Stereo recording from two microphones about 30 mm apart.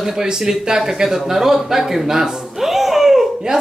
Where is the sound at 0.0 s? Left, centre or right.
Centre.